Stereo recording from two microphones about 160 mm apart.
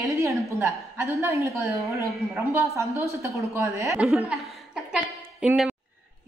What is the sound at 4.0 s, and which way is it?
Chuckle, 5° right (ahead or behind).